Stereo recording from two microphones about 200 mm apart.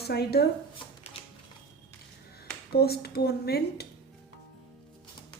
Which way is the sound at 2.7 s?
50° left (ahead or behind).